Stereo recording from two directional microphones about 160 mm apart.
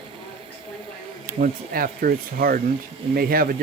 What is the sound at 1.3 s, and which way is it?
Speech, 65° right (ahead or behind).